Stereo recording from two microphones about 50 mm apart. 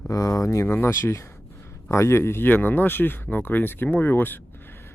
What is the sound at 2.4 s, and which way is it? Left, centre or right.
Speech, left.